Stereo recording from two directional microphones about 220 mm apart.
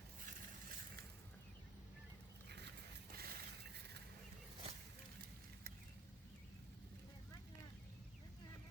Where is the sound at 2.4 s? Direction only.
50° right (ahead or behind).